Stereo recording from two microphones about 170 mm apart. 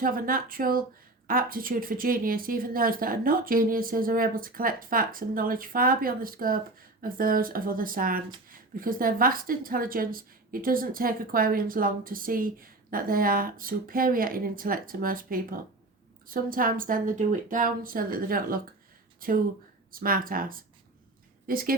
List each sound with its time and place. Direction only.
0.0 s a woman's voice: 55° right (ahead or behind)